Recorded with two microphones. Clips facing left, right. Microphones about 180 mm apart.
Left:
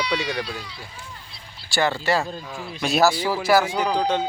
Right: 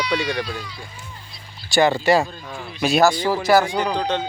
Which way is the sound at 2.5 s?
5° left (ahead or behind).